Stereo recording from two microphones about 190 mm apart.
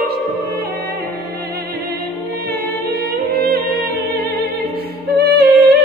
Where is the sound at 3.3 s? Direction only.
55° right (ahead or behind).